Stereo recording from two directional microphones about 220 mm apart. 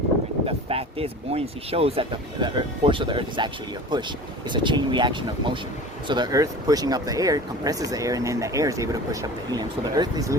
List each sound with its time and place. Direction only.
0.4 s speech: 25° right (ahead or behind)